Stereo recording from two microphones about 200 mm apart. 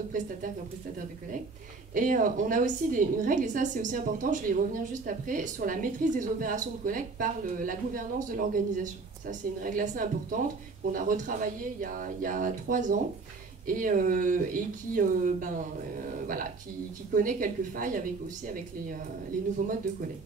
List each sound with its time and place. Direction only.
2.0 s a woman's voice: 40° right (ahead or behind)
17.1 s a woman's voice: 45° right (ahead or behind)